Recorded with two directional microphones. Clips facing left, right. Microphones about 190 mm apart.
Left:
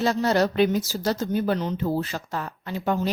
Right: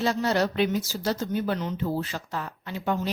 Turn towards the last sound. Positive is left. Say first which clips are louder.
# left 3 dB
turn(degrees=45)  # may be behind; listen again after turning